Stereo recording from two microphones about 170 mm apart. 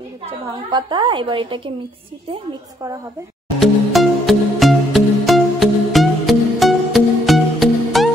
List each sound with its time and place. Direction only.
0.7 s a woman's voice: 25° right (ahead or behind)
3.5 s music: centre (ahead or behind)